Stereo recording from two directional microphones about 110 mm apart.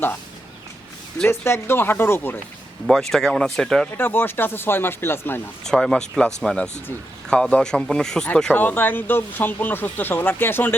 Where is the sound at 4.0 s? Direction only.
20° left (ahead or behind).